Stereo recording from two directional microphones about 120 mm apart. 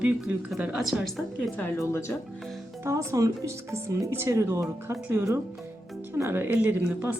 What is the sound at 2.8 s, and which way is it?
Speech, 25° right (ahead or behind).